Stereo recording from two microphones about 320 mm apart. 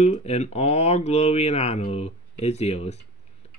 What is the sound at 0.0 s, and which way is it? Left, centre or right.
Mantra, centre.